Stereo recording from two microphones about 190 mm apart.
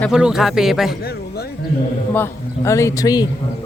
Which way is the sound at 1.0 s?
55° left (ahead or behind).